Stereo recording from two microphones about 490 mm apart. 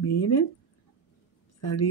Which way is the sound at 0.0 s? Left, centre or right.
Left.